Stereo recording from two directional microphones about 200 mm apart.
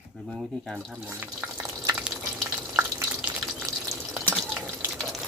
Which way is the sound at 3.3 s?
5° right (ahead or behind).